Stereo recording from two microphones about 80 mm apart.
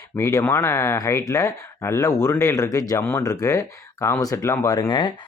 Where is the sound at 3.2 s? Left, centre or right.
Left.